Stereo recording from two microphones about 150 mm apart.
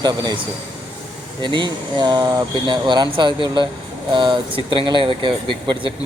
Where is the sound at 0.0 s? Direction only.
30° right (ahead or behind).